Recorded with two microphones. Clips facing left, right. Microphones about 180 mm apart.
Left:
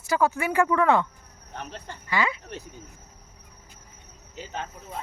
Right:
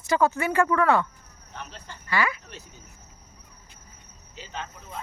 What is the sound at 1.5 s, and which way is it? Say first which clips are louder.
Speech: left 3 dB; 55° left (ahead or behind).